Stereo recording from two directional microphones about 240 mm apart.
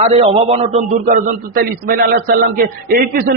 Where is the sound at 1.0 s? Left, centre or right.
Right.